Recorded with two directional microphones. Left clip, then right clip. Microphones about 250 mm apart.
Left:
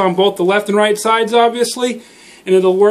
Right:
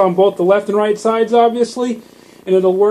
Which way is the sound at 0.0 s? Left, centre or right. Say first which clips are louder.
Right 1 dB; right.